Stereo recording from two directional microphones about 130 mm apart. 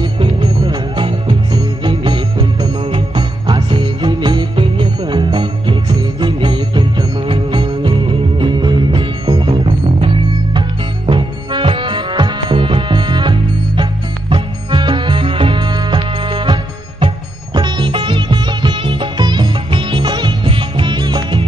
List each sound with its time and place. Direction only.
0.0 s music: 35° right (ahead or behind)
17.6 s music: 35° right (ahead or behind)